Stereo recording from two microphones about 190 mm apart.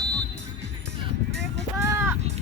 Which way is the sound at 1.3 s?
70° right (ahead or behind).